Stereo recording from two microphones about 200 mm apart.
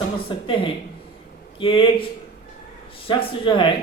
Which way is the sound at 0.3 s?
25° left (ahead or behind).